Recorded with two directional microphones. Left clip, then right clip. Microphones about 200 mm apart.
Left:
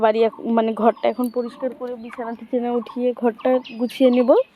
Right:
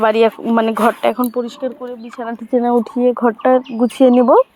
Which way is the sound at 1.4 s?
35° right (ahead or behind).